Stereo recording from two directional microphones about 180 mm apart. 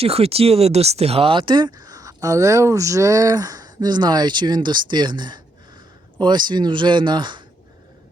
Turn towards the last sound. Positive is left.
turn(degrees=-25)  # may be behind; listen again after turning